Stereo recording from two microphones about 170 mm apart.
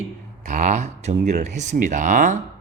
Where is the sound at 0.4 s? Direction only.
45° right (ahead or behind).